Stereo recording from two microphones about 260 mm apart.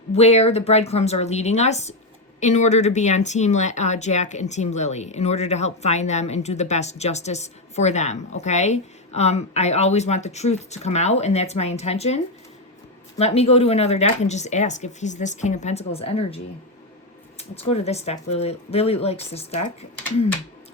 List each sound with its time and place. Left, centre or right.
0.1 s speech: left